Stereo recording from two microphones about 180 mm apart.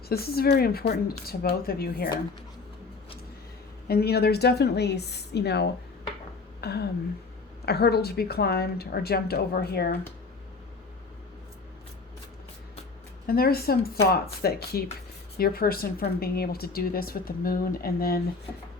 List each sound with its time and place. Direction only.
0.1 s speech: 60° left (ahead or behind)
3.8 s speech: 60° left (ahead or behind)
6.6 s a sound: 65° left (ahead or behind)
7.6 s speech: 60° left (ahead or behind)
13.2 s speech: 55° left (ahead or behind)